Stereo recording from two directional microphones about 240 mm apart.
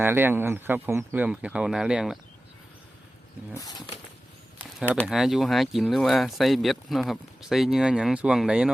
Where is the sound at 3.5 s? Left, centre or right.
Centre.